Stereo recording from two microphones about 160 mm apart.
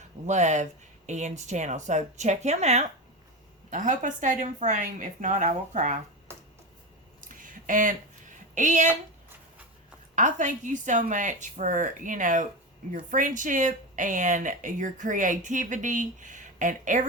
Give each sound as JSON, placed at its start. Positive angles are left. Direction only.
{"t": 0.3, "sound": "speech", "side_deg": -45}
{"t": 7.2, "sound": "a sound", "side_deg": -55}
{"t": 8.5, "sound": "speech", "side_deg": -50}
{"t": 10.2, "sound": "speech", "side_deg": -50}